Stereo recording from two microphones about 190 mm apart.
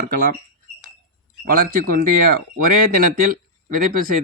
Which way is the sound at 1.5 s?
50° right (ahead or behind).